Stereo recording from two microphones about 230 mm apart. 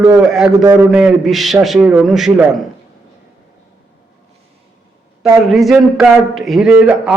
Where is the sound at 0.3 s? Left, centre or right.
Centre.